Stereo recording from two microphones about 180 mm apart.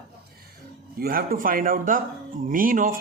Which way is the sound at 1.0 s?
55° right (ahead or behind).